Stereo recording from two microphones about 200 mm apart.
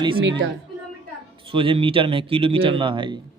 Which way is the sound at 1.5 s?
25° right (ahead or behind).